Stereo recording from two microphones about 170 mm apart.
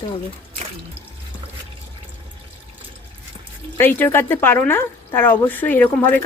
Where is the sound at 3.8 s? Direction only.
10° left (ahead or behind).